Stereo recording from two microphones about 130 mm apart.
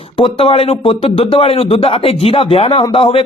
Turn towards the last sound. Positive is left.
turn(degrees=45)  # may be behind; listen again after turning